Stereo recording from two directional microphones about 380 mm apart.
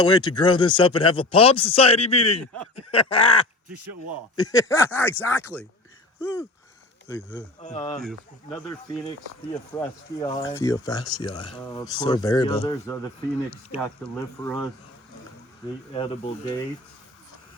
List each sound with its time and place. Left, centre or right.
0.0 s speech: centre
7.3 s speech: centre
8.0 s speech: centre